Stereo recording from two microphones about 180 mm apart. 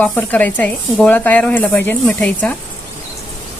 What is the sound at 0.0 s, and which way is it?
Speech, 10° left (ahead or behind).